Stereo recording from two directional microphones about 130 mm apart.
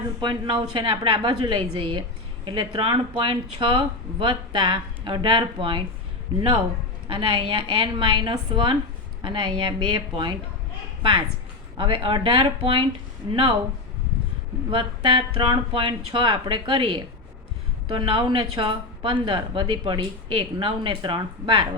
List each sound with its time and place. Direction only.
0.2 s a woman's voice: 35° right (ahead or behind)
7.1 s a woman's voice: 40° right (ahead or behind)
11.8 s a woman's voice: 40° right (ahead or behind)
14.7 s a woman's voice: 40° right (ahead or behind)